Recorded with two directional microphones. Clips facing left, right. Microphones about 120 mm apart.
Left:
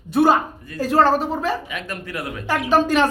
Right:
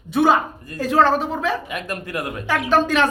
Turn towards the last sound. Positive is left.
turn(degrees=10)  # may be behind; listen again after turning